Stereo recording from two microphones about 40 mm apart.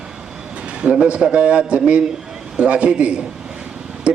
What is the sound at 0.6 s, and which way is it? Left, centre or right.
A man's voice, right.